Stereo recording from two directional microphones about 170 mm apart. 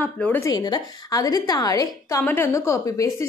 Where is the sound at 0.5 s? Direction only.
25° left (ahead or behind).